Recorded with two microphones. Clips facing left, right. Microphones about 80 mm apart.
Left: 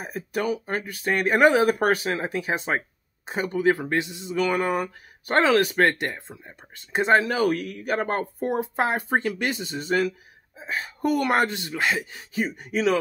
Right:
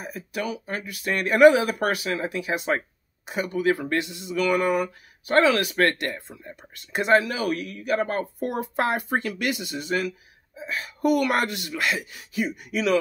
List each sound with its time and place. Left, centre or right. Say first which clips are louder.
0.0 s speech: left 3 dB; left